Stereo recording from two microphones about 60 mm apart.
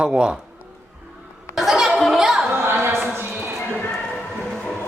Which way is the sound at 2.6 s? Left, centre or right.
Right.